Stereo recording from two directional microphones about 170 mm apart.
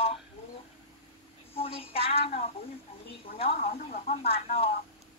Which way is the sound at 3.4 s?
35° left (ahead or behind).